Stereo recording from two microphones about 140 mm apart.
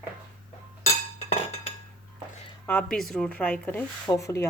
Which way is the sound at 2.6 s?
10° left (ahead or behind).